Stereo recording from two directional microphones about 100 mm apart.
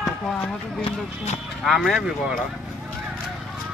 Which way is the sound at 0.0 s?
Centre (ahead or behind).